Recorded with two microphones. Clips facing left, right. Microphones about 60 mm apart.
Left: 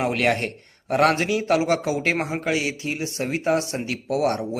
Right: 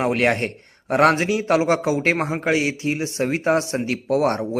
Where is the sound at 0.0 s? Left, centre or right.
Right.